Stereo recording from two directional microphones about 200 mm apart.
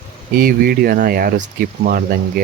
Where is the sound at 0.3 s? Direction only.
45° right (ahead or behind).